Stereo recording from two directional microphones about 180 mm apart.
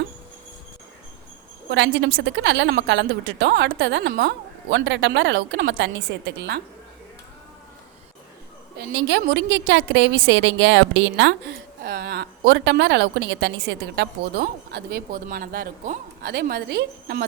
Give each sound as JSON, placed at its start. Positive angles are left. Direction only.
{"t": 1.7, "sound": "a woman's voice", "side_deg": -85}
{"t": 8.8, "sound": "a woman's voice", "side_deg": -75}
{"t": 16.3, "sound": "a woman's voice", "side_deg": -60}